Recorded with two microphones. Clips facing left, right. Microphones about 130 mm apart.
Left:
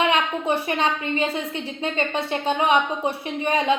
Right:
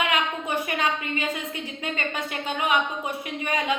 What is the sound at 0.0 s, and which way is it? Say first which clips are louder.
A woman's voice: left 4 dB; 30° left (ahead or behind).